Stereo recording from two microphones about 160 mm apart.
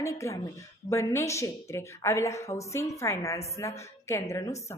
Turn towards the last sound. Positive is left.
turn(degrees=20)  # may be behind; listen again after turning